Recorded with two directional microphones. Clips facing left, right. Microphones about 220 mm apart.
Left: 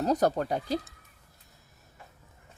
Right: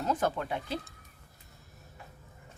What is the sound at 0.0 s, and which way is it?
Speech, 40° left (ahead or behind).